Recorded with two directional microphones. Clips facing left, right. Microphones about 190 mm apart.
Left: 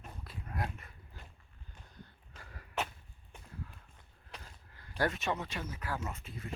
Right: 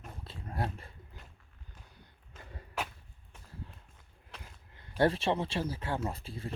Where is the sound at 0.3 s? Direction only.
30° right (ahead or behind).